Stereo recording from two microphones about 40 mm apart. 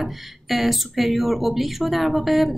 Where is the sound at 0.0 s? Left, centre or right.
Centre.